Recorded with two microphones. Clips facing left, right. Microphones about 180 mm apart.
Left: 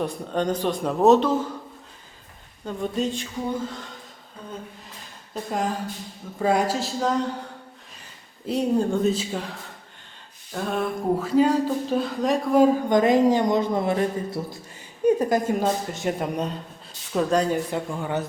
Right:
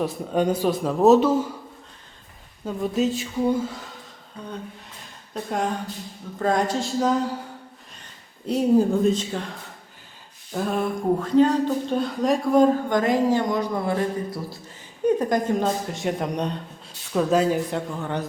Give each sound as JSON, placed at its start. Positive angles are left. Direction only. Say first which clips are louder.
{"t": 0.0, "sound": "speech", "louder": "right 3 dB", "side_deg": -5}
{"t": 2.6, "sound": "speech", "louder": "right 3 dB", "side_deg": -5}
{"t": 5.3, "sound": "speech", "louder": "right 1 dB", "side_deg": 0}
{"t": 8.4, "sound": "speech", "louder": "right 3 dB", "side_deg": 0}
{"t": 12.9, "sound": "speech", "louder": "left 2 dB", "side_deg": 20}
{"t": 15.2, "sound": "speech", "louder": "even", "side_deg": 5}